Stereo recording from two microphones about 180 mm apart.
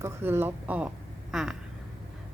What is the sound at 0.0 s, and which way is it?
A woman's voice, 10° right (ahead or behind).